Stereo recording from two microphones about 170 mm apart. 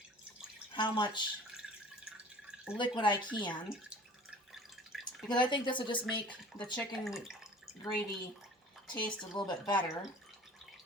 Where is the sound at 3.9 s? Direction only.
5° right (ahead or behind).